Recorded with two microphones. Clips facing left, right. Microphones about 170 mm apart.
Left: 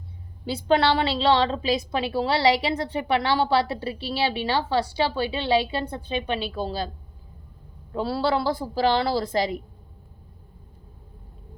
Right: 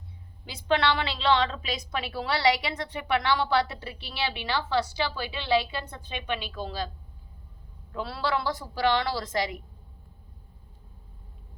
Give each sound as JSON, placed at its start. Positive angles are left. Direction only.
{"t": 0.4, "sound": "a woman's voice", "side_deg": 30}
{"t": 7.9, "sound": "a woman's voice", "side_deg": 30}